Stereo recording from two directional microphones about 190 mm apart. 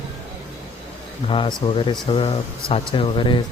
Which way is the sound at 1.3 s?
25° left (ahead or behind).